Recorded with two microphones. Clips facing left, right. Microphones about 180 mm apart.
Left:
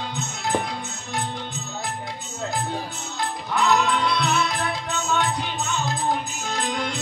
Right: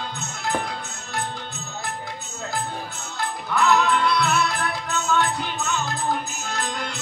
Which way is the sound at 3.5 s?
20° left (ahead or behind).